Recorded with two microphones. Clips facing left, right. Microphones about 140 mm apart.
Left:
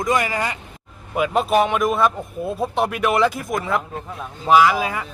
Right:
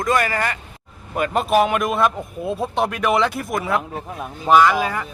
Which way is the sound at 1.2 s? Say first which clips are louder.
Even; centre (ahead or behind).